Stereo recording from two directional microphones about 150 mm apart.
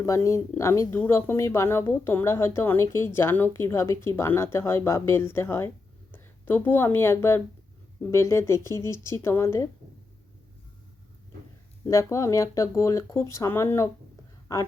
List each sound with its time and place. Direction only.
0.0 s speech: 20° left (ahead or behind)
11.9 s speech: 20° left (ahead or behind)